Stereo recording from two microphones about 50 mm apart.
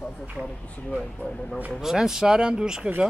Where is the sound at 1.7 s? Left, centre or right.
Centre.